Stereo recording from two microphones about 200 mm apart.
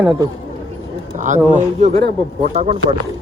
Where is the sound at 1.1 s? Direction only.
40° right (ahead or behind).